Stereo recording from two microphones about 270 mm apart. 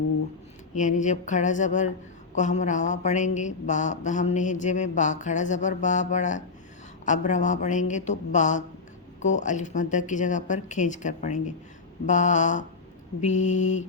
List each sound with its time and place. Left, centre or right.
0.7 s a woman's voice: left